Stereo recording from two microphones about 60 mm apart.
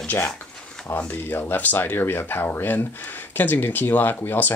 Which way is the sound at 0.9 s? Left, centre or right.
Left.